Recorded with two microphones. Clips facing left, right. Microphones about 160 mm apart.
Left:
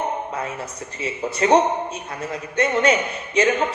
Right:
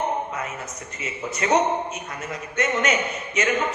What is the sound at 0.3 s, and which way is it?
A man's voice, 30° left (ahead or behind).